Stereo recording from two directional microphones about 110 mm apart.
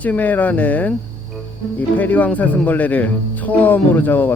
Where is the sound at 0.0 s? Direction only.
15° left (ahead or behind).